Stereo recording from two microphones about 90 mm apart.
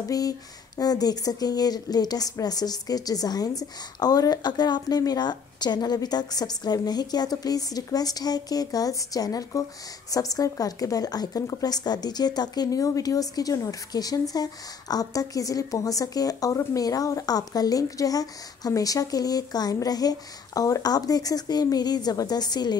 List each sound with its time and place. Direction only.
0.1 s speech: 45° left (ahead or behind)